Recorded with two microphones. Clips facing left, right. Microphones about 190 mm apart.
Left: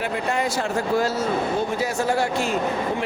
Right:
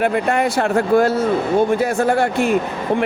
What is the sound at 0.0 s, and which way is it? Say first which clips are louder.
Speech: right 7 dB; 60° right (ahead or behind).